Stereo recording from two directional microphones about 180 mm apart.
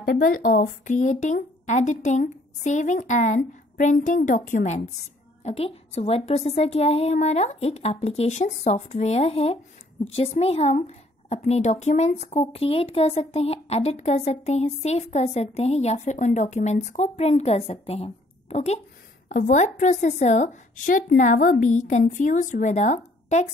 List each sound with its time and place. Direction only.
0.0 s a woman's voice: 55° left (ahead or behind)